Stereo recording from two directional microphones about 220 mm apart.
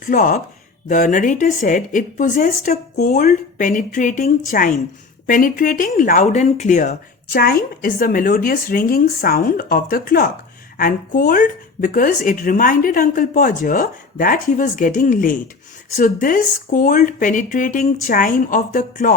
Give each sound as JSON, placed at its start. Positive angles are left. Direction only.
{"t": 0.0, "sound": "speech", "side_deg": 40}